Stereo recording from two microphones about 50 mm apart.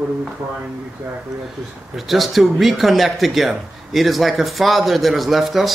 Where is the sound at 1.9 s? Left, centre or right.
Centre.